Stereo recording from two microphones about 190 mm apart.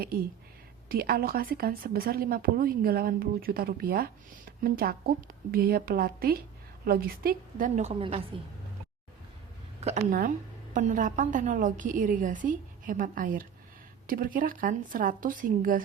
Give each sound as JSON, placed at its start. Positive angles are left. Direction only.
{"t": 0.0, "sound": "a woman's voice", "side_deg": -50}
{"t": 7.8, "sound": "a woman's voice", "side_deg": -30}
{"t": 9.8, "sound": "a woman's voice", "side_deg": -40}